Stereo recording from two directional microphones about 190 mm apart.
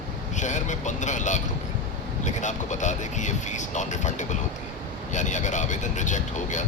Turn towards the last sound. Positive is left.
turn(degrees=40)  # may be behind; listen again after turning